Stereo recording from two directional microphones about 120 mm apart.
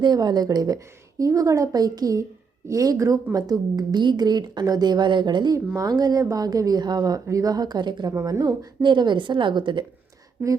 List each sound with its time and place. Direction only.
0.0 s a woman's voice: 35° right (ahead or behind)
8.1 s speech: 25° right (ahead or behind)
10.4 s a woman's voice: 20° right (ahead or behind)